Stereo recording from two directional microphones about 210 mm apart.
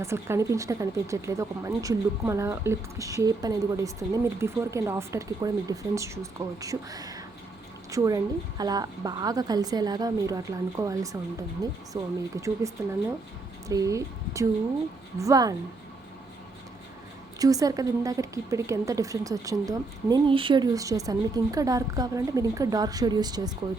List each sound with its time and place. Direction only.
0.0 s a woman's voice: 15° right (ahead or behind)
17.4 s a woman's voice: 15° right (ahead or behind)